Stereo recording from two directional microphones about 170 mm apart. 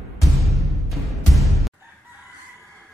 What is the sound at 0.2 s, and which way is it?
Music, centre (ahead or behind).